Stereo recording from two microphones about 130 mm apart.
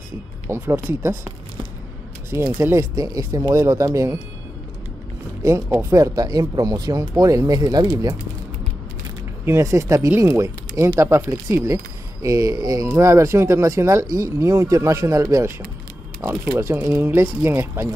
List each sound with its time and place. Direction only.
0.5 s speech: 20° right (ahead or behind)
2.3 s speech: 20° right (ahead or behind)
5.4 s speech: 25° right (ahead or behind)
9.4 s speech: 20° right (ahead or behind)